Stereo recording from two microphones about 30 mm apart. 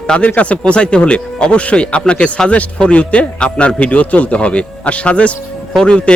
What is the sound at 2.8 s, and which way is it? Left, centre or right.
A man's voice, left.